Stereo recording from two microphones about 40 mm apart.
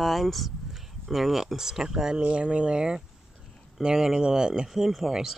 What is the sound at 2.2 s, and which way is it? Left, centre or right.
Speech, right.